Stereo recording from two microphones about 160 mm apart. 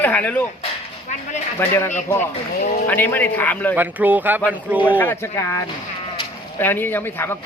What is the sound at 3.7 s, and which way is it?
Speech, 10° right (ahead or behind).